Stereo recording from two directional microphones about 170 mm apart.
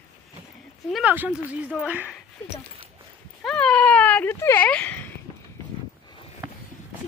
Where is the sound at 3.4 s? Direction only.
5° left (ahead or behind).